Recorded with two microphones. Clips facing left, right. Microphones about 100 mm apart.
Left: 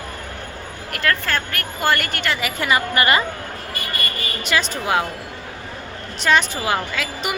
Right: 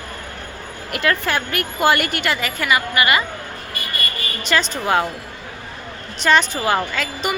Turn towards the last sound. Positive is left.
turn(degrees=5)  # may be behind; listen again after turning